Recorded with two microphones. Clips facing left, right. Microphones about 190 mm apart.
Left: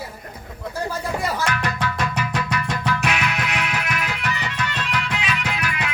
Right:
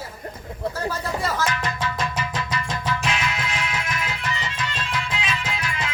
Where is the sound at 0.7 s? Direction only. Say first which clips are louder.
Left 3 dB; 10° left (ahead or behind).